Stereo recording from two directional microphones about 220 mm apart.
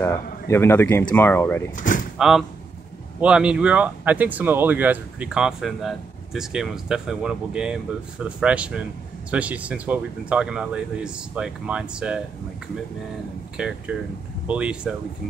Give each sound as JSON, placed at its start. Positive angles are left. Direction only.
{"t": 0.0, "sound": "speech", "side_deg": 10}
{"t": 1.8, "sound": "speech", "side_deg": 35}
{"t": 2.1, "sound": "speech", "side_deg": 0}
{"t": 13.6, "sound": "speech", "side_deg": -5}